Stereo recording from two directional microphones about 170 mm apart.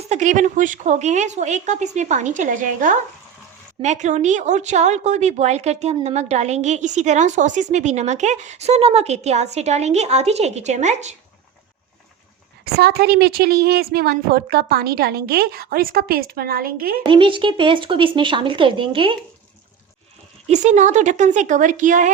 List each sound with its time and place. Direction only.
0.1 s a woman's voice: 45° right (ahead or behind)
12.7 s a woman's voice: 70° right (ahead or behind)
17.0 s speech: 30° right (ahead or behind)
20.5 s a woman's voice: 45° right (ahead or behind)